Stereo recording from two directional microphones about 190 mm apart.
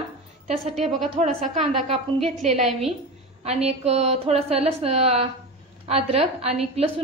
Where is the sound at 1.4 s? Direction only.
30° right (ahead or behind).